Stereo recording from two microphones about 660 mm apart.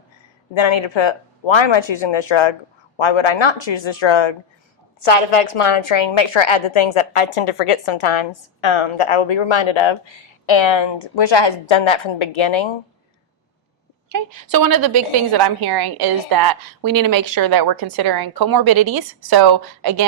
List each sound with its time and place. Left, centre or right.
0.5 s a woman's voice: left
5.0 s a woman's voice: left
14.1 s a woman's voice: right